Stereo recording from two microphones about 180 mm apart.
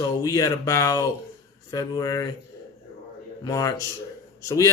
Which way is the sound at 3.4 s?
20° left (ahead or behind).